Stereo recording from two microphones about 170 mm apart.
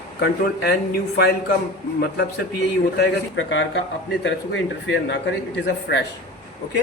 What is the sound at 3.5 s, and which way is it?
Speech, 90° left.